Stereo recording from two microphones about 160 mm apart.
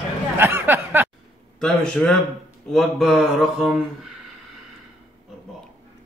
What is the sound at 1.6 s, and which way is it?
Speech, 5° left (ahead or behind).